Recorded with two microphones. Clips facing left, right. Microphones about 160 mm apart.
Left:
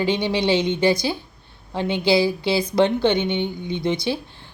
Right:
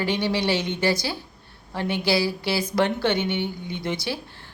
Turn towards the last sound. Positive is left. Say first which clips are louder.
# left 5 dB
turn(degrees=20)  # may be behind; listen again after turning